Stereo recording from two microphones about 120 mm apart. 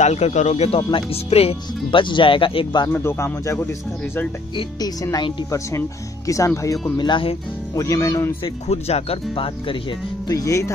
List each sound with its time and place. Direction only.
0.0 s speech: 70° left (ahead or behind); by 2.9 s 40° left (ahead or behind)
2.9 s speech: 20° left (ahead or behind)
4.6 s speech: 35° left (ahead or behind)
7.0 s speech: 45° left (ahead or behind)
7.7 s speech: 25° left (ahead or behind)
8.6 s speech: 60° left (ahead or behind)
10.2 s speech: 25° left (ahead or behind)